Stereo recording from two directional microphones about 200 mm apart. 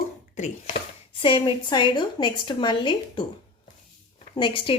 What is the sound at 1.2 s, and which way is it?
A woman's voice, 25° left (ahead or behind).